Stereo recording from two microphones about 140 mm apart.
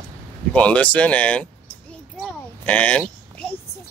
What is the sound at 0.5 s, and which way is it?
Speech, 10° left (ahead or behind).